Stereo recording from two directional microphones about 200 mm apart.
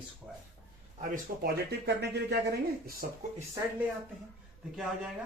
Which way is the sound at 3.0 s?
45° right (ahead or behind).